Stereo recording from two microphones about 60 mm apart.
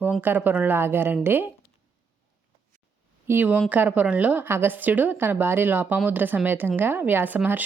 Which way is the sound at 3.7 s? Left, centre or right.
Right.